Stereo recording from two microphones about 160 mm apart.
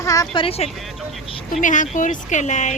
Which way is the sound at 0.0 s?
20° left (ahead or behind).